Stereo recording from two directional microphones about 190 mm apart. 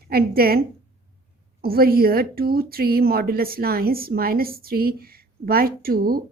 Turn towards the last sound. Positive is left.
turn(degrees=-50)  # may be behind; listen again after turning